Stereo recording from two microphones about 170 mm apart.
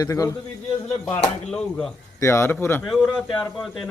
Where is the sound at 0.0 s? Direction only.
20° left (ahead or behind).